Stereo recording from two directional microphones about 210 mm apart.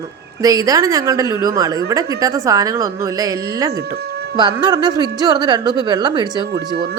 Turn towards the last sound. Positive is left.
turn(degrees=-20)  # may be behind; listen again after turning